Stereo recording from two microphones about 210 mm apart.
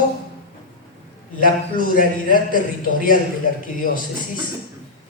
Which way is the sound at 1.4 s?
40° left (ahead or behind).